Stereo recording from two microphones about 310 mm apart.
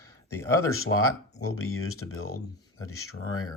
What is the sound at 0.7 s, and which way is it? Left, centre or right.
Speech, left.